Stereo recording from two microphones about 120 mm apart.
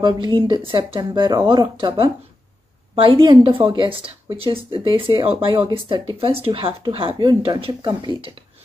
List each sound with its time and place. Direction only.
0.0 s a woman's voice: 40° right (ahead or behind)
7.2 s speech: 35° right (ahead or behind)